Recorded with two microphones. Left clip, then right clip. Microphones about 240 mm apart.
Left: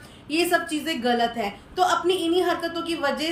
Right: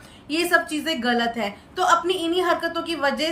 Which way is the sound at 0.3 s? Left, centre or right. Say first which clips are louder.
Right 2 dB; centre.